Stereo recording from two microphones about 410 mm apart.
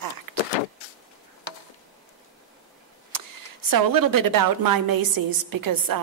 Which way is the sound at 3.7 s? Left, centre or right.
Right.